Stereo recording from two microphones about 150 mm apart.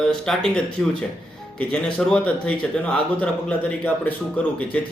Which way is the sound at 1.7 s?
5° left (ahead or behind).